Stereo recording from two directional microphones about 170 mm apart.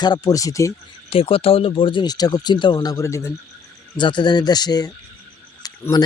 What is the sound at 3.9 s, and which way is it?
A man's voice, 25° left (ahead or behind).